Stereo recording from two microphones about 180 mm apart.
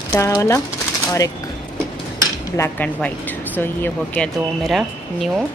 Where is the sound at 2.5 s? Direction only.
15° left (ahead or behind).